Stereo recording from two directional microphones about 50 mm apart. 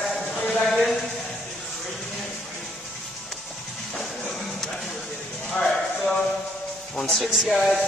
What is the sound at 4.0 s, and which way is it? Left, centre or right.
Music, centre.